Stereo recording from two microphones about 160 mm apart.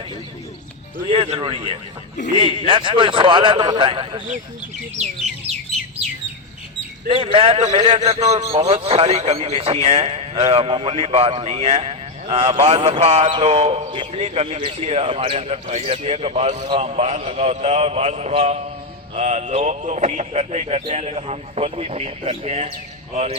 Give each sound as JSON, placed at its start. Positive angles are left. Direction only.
{"t": 1.1, "sound": "a man's voice", "side_deg": -35}
{"t": 7.1, "sound": "a man's voice", "side_deg": -35}